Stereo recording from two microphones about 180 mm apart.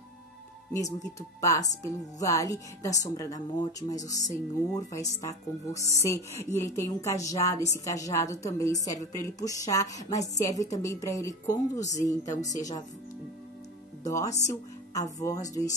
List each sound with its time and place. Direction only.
0.7 s a woman's voice: 20° left (ahead or behind)
14.0 s a woman's voice: 20° left (ahead or behind)